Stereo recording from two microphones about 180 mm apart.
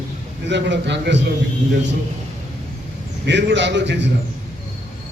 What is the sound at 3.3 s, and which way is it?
Speech, 80° right.